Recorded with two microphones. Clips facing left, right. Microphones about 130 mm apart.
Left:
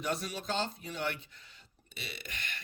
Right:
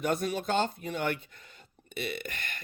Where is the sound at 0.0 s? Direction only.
50° right (ahead or behind).